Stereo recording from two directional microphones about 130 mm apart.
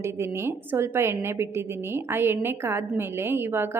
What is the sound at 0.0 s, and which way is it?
A woman's voice, 20° right (ahead or behind).